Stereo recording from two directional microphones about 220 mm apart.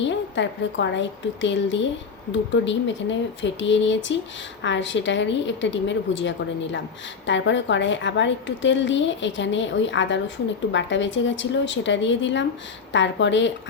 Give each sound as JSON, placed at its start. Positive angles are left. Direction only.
{"t": 0.0, "sound": "a woman's voice", "side_deg": 55}